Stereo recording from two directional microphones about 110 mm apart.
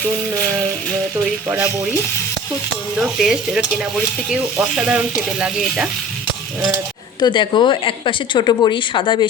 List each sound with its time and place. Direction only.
2.9 s speech: 5° right (ahead or behind)
4.6 s speech: 5° right (ahead or behind)
7.2 s a woman's voice: 45° left (ahead or behind)